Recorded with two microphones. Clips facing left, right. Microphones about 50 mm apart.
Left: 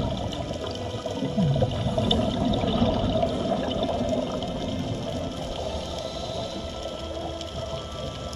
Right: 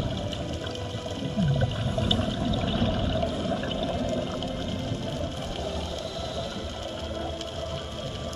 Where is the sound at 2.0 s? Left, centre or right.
Centre.